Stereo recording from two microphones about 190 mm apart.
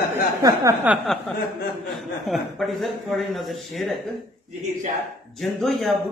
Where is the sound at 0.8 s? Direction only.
5° right (ahead or behind).